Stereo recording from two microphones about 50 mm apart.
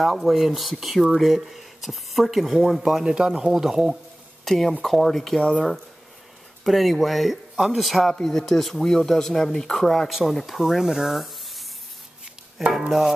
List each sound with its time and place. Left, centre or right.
0.0 s speech: centre
3.0 s speech: centre
4.5 s speech: centre
5.4 s speech: left
6.6 s speech: centre
12.7 s speech: centre